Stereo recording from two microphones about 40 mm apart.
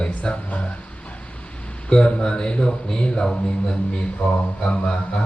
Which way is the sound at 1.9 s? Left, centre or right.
Left.